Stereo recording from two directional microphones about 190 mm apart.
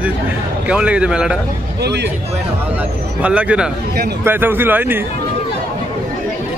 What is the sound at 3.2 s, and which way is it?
Speech, 5° right (ahead or behind).